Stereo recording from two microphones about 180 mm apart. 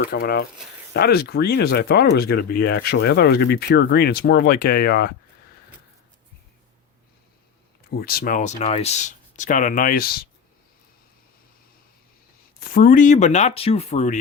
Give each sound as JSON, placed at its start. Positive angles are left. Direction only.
{"t": 0.0, "sound": "speech", "side_deg": 60}
{"t": 7.9, "sound": "speech", "side_deg": 60}
{"t": 12.5, "sound": "speech", "side_deg": 55}